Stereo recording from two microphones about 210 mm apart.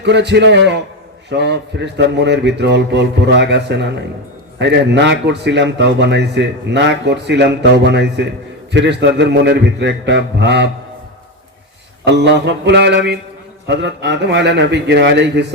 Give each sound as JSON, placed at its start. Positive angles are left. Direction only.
{"t": 0.0, "sound": "a man's voice", "side_deg": -55}
{"t": 12.0, "sound": "a man's voice", "side_deg": -55}